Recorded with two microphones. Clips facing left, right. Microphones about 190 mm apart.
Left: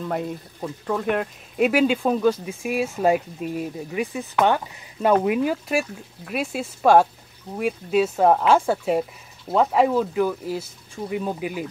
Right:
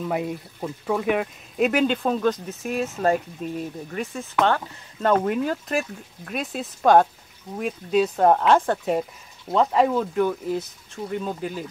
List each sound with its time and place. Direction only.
0.1 s speech: 5° right (ahead or behind); by 11.6 s 10° left (ahead or behind)